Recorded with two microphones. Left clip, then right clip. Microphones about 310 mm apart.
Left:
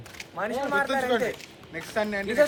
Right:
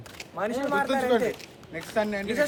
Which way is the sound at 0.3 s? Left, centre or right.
Centre.